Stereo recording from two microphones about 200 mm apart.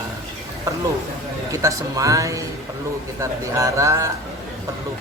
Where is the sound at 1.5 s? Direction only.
15° right (ahead or behind).